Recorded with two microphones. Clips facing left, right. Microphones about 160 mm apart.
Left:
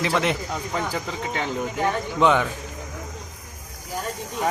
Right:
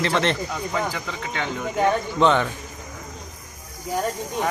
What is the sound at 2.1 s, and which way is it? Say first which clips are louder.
Speech: left 1 dB; 5° left (ahead or behind).